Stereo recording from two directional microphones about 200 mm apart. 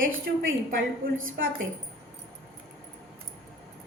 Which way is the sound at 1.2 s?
85° right.